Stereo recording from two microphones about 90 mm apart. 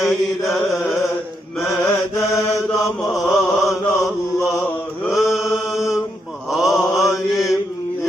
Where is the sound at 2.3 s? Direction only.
35° left (ahead or behind).